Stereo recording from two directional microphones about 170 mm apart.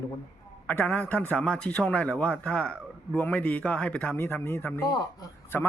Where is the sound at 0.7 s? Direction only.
10° left (ahead or behind).